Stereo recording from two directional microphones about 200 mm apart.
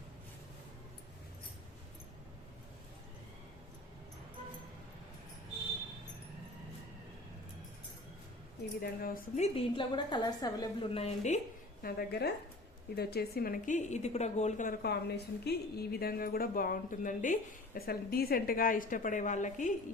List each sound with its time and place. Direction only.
8.8 s a woman's voice: 45° left (ahead or behind)
9.7 s a woman's voice: 25° left (ahead or behind)
11.8 s a woman's voice: 50° left (ahead or behind)